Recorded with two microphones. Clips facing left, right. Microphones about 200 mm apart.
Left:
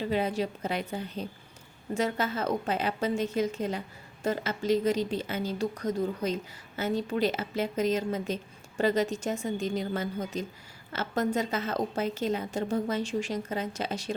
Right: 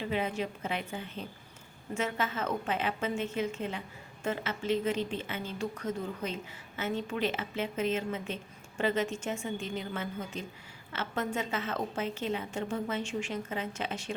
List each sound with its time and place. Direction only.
0.1 s a woman's voice: 35° left (ahead or behind)